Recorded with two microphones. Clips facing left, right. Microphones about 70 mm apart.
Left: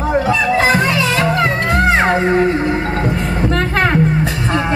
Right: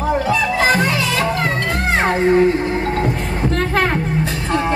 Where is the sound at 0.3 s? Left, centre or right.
Left.